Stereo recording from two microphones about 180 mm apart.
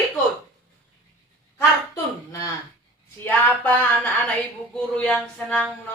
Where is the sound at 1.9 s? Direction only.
15° left (ahead or behind).